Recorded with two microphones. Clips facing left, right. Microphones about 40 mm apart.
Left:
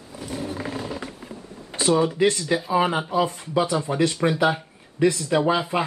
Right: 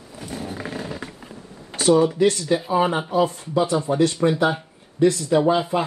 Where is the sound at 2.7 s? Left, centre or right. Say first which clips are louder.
Even; centre.